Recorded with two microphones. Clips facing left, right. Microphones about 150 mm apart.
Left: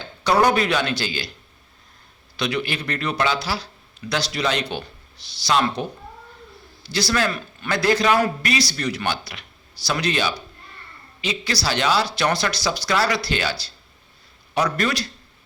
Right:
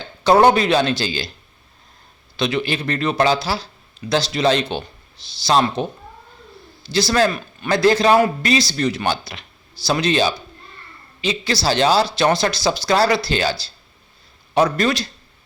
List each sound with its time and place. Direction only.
0.4 s a man's voice: 30° right (ahead or behind)
2.3 s a man's voice: 25° right (ahead or behind)
6.9 s a man's voice: 25° right (ahead or behind)